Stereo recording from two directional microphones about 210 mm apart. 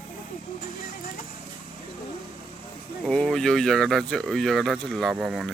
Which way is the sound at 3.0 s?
Centre (ahead or behind).